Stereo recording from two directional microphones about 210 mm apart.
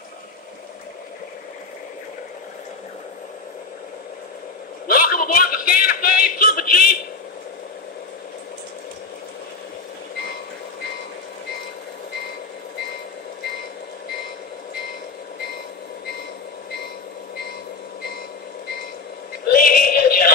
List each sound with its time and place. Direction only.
4.8 s music: 45° left (ahead or behind)
19.4 s synthetic singing: 45° left (ahead or behind)